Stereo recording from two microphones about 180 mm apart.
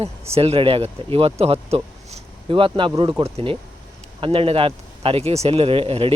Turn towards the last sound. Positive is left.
turn(degrees=-30)  # may be behind; listen again after turning